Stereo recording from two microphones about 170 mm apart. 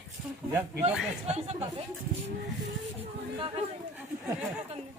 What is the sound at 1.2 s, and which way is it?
Speech, 40° right (ahead or behind).